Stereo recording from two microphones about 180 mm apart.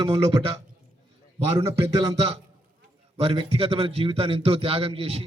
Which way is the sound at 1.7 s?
30° right (ahead or behind).